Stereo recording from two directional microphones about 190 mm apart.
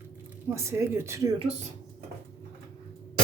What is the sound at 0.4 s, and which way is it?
Speech, 15° right (ahead or behind).